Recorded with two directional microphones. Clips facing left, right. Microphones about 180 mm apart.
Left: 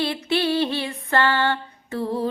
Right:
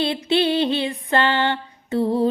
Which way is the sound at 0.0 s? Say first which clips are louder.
Right 3 dB; 20° right (ahead or behind).